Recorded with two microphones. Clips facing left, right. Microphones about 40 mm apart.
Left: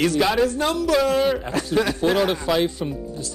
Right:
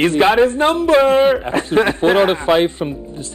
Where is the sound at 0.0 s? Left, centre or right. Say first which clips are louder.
Right 7 dB; right.